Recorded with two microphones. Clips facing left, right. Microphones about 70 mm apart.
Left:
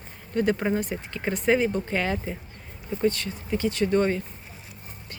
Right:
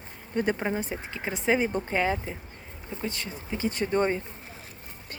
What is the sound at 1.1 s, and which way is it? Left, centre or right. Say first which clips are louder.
Speech: left 3 dB; centre.